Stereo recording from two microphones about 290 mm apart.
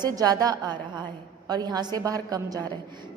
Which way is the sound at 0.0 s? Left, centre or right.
Centre.